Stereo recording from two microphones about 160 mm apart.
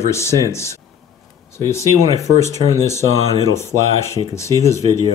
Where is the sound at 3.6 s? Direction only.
20° left (ahead or behind).